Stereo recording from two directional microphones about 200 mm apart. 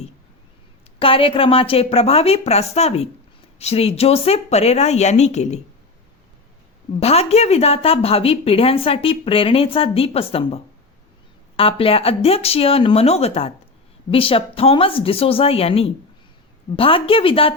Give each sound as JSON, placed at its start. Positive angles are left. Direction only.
{"t": 0.9, "sound": "speech", "side_deg": 25}
{"t": 7.0, "sound": "speech", "side_deg": 30}